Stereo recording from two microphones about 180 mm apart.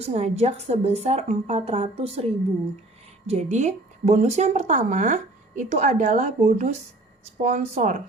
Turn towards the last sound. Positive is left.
turn(degrees=-45)  # may be behind; listen again after turning